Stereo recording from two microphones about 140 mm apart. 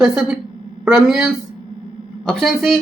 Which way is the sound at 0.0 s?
5° right (ahead or behind).